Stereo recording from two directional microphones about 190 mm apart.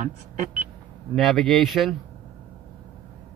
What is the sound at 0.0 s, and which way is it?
Speech, 40° right (ahead or behind).